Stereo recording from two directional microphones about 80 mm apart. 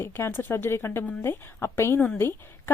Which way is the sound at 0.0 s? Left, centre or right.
Left.